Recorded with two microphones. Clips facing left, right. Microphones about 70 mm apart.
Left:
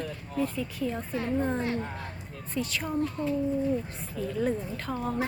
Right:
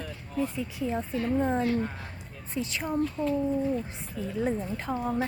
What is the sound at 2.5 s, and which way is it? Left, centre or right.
Speech, right.